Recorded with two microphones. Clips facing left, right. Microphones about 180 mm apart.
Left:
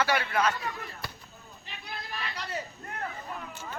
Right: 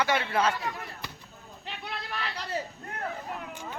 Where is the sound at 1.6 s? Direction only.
75° right (ahead or behind).